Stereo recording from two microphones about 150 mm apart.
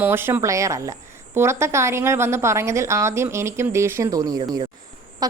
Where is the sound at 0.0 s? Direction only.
15° right (ahead or behind).